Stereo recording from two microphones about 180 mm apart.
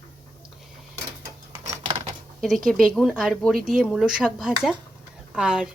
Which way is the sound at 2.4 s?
Centre (ahead or behind).